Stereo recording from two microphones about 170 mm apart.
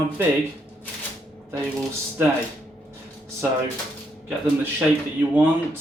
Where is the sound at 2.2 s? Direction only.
10° right (ahead or behind).